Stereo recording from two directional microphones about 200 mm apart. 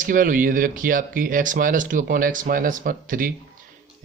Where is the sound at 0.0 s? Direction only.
40° right (ahead or behind).